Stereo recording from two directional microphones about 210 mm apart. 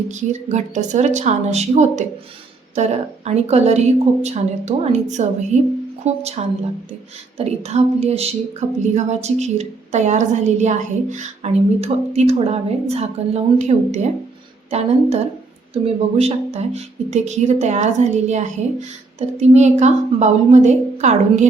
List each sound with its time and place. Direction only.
0.1 s a woman's voice: 35° right (ahead or behind)